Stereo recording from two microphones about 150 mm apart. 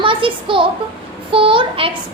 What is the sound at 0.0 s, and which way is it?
A child's voice, 35° right (ahead or behind).